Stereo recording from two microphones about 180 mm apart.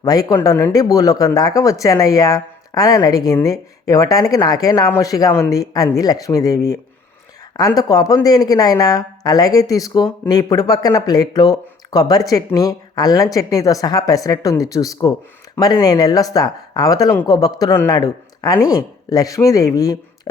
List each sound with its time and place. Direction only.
0.0 s speech: 20° left (ahead or behind)